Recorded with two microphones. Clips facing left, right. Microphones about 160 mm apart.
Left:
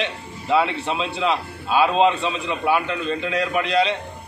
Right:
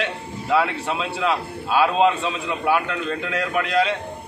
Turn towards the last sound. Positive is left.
turn(degrees=15)  # may be behind; listen again after turning